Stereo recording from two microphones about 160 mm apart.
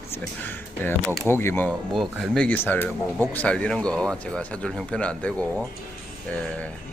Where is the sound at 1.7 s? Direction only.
Centre (ahead or behind).